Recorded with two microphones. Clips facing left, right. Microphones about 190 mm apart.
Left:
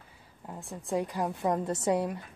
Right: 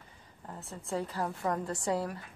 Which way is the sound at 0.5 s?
15° left (ahead or behind).